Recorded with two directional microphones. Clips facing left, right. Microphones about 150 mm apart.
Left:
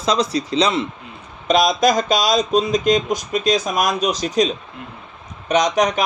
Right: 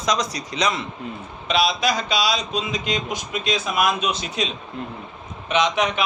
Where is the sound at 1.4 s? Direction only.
45° left (ahead or behind).